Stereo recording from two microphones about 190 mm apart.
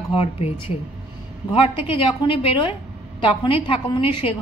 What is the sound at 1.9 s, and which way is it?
Speech, 30° left (ahead or behind).